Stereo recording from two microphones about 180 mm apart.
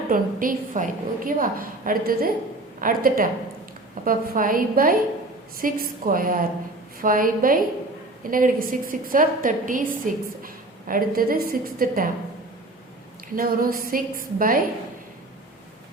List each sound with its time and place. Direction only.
0.1 s a woman's voice: 50° right (ahead or behind)
13.3 s a woman's voice: 50° right (ahead or behind)